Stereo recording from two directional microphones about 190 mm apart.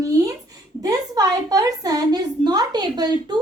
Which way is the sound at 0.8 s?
20° right (ahead or behind).